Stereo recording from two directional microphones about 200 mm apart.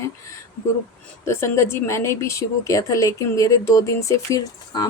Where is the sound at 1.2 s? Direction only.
15° left (ahead or behind).